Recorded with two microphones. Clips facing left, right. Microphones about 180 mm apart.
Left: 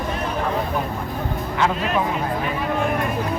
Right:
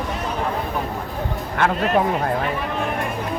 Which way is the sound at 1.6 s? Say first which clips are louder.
Right 3 dB; 45° right (ahead or behind).